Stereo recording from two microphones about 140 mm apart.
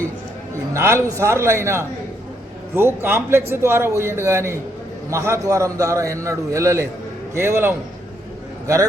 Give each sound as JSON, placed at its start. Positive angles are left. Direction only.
{"t": 0.7, "sound": "a man's voice", "side_deg": -20}